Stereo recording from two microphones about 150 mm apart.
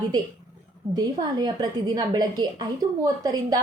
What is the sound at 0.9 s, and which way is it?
A woman's voice, 30° right (ahead or behind).